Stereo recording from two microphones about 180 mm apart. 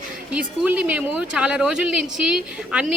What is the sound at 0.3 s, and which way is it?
Speech, 10° right (ahead or behind).